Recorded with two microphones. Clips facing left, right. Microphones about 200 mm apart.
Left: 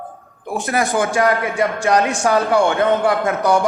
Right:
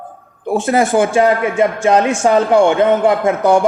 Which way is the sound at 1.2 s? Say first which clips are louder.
Right 4 dB; 30° right (ahead or behind).